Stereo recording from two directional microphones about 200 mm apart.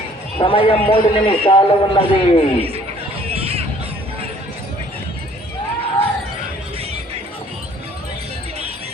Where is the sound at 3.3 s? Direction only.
30° right (ahead or behind).